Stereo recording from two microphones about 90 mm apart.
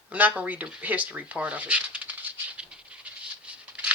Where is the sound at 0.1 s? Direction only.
15° right (ahead or behind).